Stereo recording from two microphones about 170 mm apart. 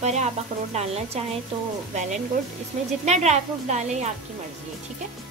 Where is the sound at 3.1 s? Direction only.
40° right (ahead or behind).